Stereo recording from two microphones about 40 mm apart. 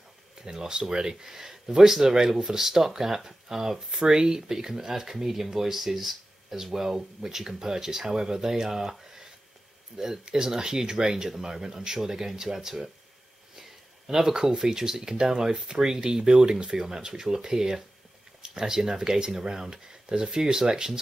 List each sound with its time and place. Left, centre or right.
0.4 s speech: centre